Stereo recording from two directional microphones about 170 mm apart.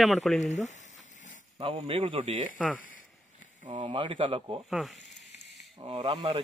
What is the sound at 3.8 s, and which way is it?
Speech, 30° right (ahead or behind).